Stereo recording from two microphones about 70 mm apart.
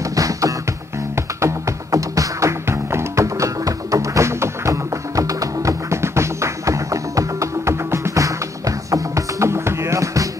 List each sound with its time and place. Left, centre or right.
0.1 s music: right